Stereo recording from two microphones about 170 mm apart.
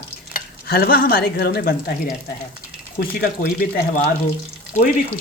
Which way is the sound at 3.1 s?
65° left (ahead or behind).